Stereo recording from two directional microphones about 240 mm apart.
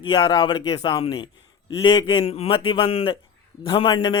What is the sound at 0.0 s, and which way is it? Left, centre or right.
A man's voice, centre.